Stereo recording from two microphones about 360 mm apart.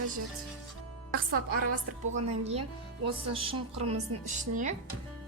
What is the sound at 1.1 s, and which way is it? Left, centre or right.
A woman's voice, right.